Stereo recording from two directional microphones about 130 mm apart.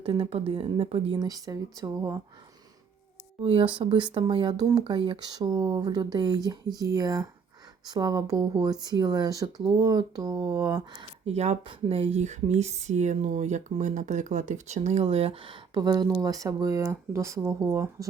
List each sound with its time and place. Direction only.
0.0 s speech: 45° right (ahead or behind); by 2.2 s 25° right (ahead or behind)
3.4 s speech: 45° right (ahead or behind); by 10.8 s 25° right (ahead or behind)
11.3 s speech: 55° right (ahead or behind); by 17.8 s 25° right (ahead or behind)